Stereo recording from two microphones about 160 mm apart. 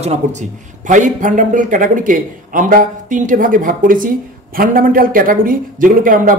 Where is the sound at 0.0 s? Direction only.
45° right (ahead or behind).